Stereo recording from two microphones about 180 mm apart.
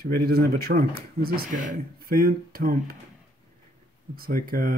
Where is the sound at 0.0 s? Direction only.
60° right (ahead or behind).